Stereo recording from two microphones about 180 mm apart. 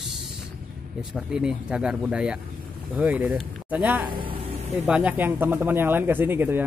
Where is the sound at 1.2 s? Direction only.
5° right (ahead or behind).